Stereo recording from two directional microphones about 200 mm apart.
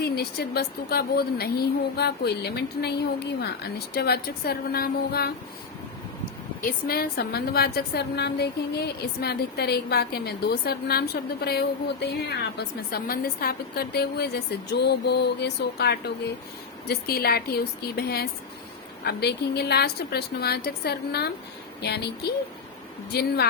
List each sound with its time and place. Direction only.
0.0 s a woman's voice: 50° left (ahead or behind)
6.6 s a woman's voice: 45° left (ahead or behind)